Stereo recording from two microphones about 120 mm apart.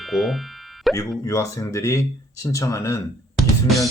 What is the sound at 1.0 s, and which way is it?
Speech, 25° left (ahead or behind).